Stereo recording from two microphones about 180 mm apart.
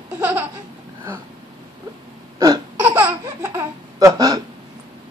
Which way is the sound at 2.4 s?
15° right (ahead or behind).